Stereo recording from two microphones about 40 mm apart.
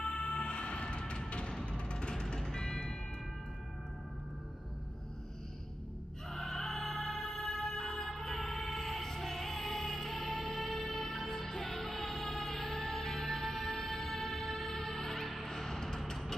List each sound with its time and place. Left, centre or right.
0.0 s music: left
6.3 s music: centre